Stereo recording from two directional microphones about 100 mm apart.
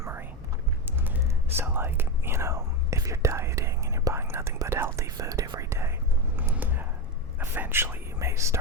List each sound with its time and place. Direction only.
0.0 s whispering: 25° right (ahead or behind)
6.3 s a sound: 20° right (ahead or behind)
7.3 s speech: 20° right (ahead or behind)